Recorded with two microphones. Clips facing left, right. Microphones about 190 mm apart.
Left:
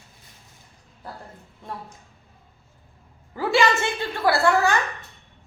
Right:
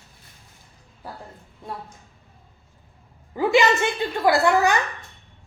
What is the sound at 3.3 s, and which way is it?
A woman's voice, 20° right (ahead or behind).